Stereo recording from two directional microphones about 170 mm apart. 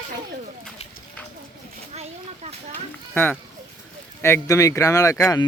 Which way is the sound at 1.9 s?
40° right (ahead or behind).